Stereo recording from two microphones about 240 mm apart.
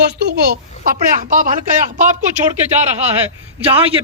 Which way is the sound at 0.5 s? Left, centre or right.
Right.